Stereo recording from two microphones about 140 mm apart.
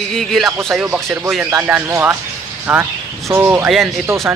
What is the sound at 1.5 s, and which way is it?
A man's voice, 20° right (ahead or behind).